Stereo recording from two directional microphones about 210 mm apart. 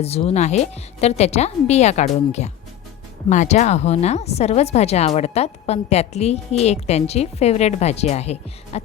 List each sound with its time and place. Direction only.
0.0 s speech: 30° left (ahead or behind)